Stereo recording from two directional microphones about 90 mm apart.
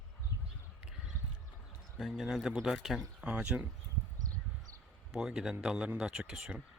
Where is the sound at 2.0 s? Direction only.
5° right (ahead or behind).